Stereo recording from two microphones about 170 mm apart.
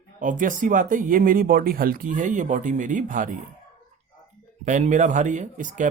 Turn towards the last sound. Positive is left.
turn(degrees=-50)  # may be behind; listen again after turning